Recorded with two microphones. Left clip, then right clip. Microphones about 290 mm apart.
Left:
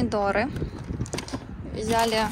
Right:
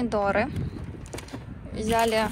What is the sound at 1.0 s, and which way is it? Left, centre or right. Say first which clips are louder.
Mechanisms: left 9 dB; centre.